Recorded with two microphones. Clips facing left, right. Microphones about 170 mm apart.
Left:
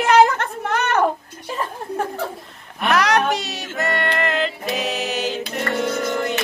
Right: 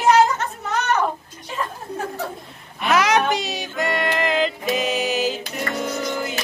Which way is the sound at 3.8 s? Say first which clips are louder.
Even; centre (ahead or behind).